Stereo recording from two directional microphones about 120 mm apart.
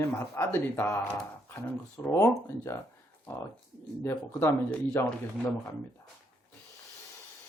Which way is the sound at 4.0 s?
25° left (ahead or behind).